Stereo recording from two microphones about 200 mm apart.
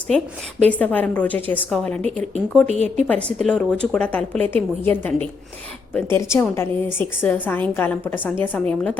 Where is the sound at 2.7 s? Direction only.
35° right (ahead or behind).